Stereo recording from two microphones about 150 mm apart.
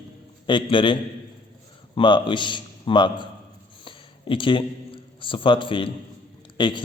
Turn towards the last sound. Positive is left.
turn(degrees=30)  # may be behind; listen again after turning